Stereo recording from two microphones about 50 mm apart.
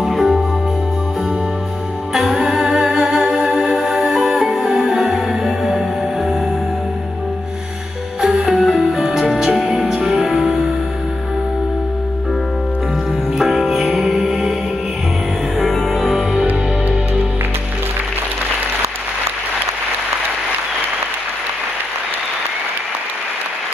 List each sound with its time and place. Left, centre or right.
0.0 s music: centre
2.1 s music: centre
8.2 s music: centre
13.4 s music: centre
15.6 s music: centre